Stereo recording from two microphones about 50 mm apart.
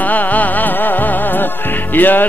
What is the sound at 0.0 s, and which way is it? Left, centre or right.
Music, left.